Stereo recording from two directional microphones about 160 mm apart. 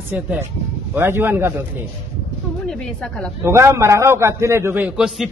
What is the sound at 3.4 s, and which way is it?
A man's voice, 15° right (ahead or behind).